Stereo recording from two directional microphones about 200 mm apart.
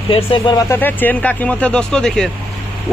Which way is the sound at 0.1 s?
25° left (ahead or behind).